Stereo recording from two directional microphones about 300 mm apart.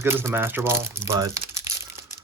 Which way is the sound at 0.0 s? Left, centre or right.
Centre.